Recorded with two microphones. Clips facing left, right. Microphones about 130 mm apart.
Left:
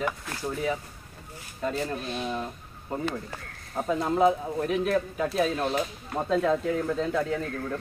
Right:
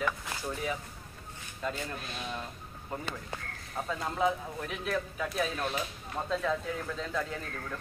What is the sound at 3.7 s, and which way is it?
Speech, 35° left (ahead or behind).